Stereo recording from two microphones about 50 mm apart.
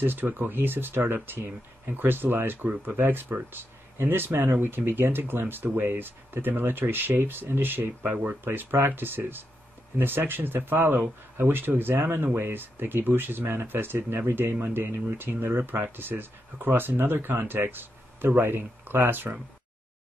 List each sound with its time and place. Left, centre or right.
0.0 s speech: right